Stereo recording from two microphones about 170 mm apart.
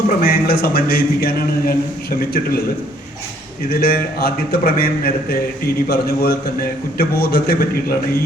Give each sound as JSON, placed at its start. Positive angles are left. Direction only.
{"t": 0.2, "sound": "a man's voice", "side_deg": 60}
{"t": 3.7, "sound": "a man's voice", "side_deg": 65}